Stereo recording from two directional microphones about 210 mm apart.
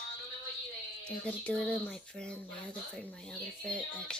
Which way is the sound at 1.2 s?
5° left (ahead or behind).